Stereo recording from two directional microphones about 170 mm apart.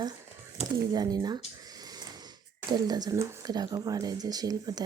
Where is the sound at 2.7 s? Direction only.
25° right (ahead or behind).